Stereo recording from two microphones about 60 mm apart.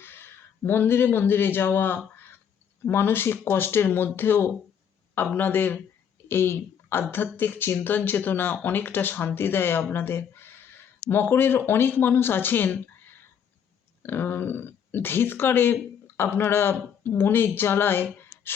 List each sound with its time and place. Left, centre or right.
0.0 s a man's voice: left